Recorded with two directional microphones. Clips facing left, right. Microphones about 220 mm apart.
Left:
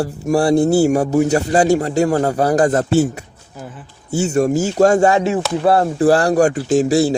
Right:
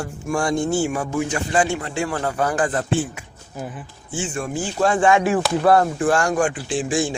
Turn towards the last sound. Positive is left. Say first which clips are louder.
# left 8 dB
turn(degrees=40)  # may be behind; listen again after turning